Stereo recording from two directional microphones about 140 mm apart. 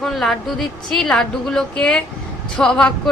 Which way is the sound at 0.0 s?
Centre (ahead or behind).